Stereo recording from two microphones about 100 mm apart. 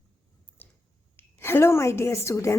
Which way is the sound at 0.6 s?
20° left (ahead or behind).